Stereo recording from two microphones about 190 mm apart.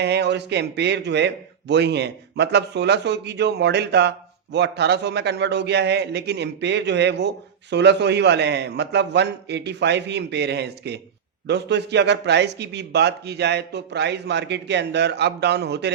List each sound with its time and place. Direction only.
0.0 s a man's voice: 60° right (ahead or behind)